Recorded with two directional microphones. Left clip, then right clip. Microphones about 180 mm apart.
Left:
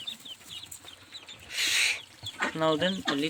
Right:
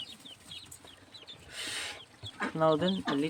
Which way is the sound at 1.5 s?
20° right (ahead or behind).